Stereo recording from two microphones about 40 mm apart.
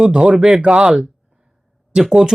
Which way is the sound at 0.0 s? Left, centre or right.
Right.